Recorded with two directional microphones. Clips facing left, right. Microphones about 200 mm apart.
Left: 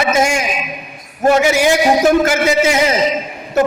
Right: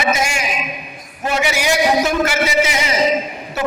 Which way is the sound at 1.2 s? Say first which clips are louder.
Left 8 dB; 50° left (ahead or behind).